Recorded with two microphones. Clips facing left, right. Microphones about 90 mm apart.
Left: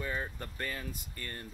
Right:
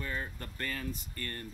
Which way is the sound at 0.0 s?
20° left (ahead or behind).